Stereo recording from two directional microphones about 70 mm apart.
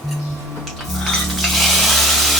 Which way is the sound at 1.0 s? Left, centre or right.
Centre.